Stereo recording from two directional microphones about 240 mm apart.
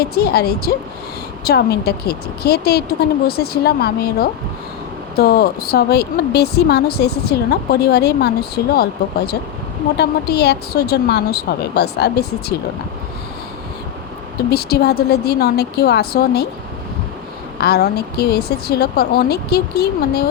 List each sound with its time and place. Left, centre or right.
0.0 s a woman's voice: left
14.5 s a woman's voice: left
17.6 s a woman's voice: left